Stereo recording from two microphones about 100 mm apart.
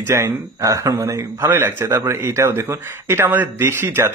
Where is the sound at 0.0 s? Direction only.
30° right (ahead or behind).